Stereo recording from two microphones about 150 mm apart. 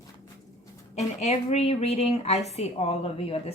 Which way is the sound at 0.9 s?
45° left (ahead or behind).